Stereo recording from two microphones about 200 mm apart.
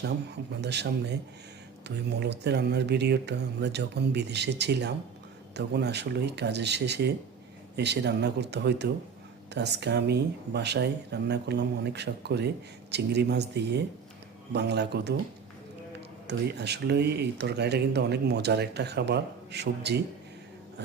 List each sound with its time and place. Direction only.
0.0 s speech: 55° right (ahead or behind)
16.2 s speech: 55° right (ahead or behind)